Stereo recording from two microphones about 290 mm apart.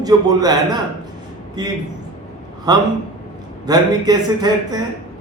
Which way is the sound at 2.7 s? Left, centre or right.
Centre.